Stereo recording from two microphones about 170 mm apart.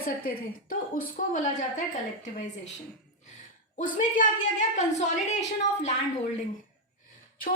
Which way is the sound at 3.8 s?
50° left (ahead or behind).